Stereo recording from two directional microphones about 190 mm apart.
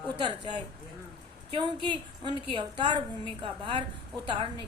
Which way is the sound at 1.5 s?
25° right (ahead or behind).